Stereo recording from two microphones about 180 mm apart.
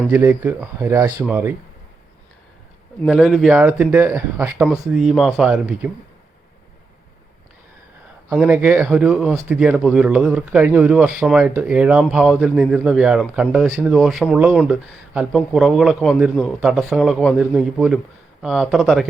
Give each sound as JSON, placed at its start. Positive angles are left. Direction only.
{"t": 0.1, "sound": "speech", "side_deg": -10}
{"t": 1.2, "sound": "speech", "side_deg": -10}
{"t": 3.1, "sound": "a man's voice", "side_deg": 0}
{"t": 3.6, "sound": "speech", "side_deg": -10}
{"t": 4.7, "sound": "a man's voice", "side_deg": 0}
{"t": 8.3, "sound": "a man's voice", "side_deg": -5}